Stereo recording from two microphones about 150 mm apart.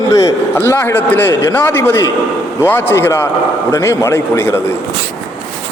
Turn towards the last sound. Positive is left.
turn(degrees=15)  # may be behind; listen again after turning